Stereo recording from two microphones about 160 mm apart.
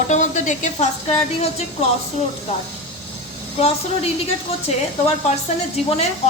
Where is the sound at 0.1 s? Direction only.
50° left (ahead or behind).